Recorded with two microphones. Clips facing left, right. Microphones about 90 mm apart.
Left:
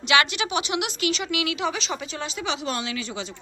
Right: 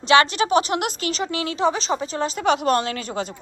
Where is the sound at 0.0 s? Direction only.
35° right (ahead or behind).